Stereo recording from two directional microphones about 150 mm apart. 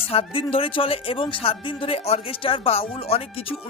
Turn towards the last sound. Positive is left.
turn(degrees=40)  # may be behind; listen again after turning